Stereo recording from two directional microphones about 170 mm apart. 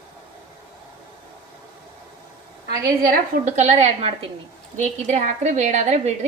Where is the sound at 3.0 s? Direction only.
50° right (ahead or behind).